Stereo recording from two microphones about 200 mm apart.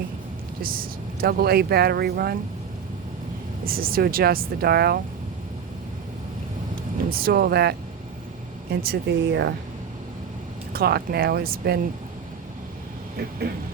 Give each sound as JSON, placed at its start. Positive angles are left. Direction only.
{"t": 0.6, "sound": "speech", "side_deg": -45}
{"t": 3.6, "sound": "speech", "side_deg": -45}
{"t": 7.1, "sound": "speech", "side_deg": -45}
{"t": 10.7, "sound": "speech", "side_deg": -50}